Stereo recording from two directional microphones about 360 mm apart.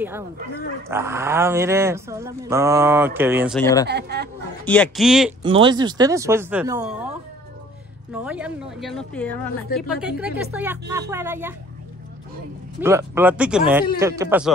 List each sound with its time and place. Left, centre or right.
0.8 s speech: centre
3.8 s speech: right
4.6 s speech: centre
5.4 s speech: centre
8.1 s speech: centre
12.8 s speech: centre